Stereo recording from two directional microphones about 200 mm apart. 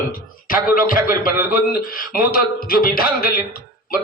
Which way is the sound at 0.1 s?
45° left (ahead or behind).